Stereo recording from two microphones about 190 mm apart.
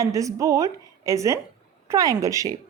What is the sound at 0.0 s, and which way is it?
A woman's voice, 15° right (ahead or behind).